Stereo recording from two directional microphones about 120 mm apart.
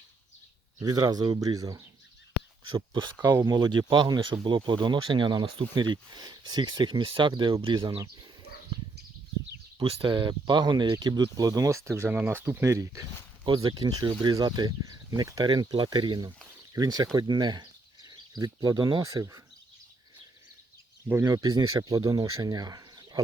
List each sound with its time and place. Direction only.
0.8 s speech: 30° right (ahead or behind)
2.6 s speech: 40° right (ahead or behind); by 3.5 s 25° right (ahead or behind)
3.5 s speech: 40° right (ahead or behind)
9.8 s speech: 50° right (ahead or behind); by 13.1 s 25° right (ahead or behind)
13.4 s speech: 40° right (ahead or behind)
21.1 s speech: 25° right (ahead or behind)